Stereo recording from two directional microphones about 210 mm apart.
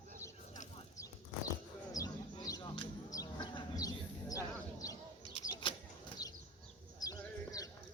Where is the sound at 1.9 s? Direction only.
15° left (ahead or behind).